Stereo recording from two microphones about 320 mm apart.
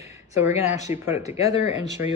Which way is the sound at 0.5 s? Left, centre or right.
Left.